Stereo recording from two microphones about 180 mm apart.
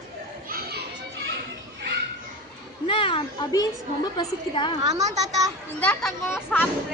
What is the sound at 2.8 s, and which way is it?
A child's voice, 30° left (ahead or behind).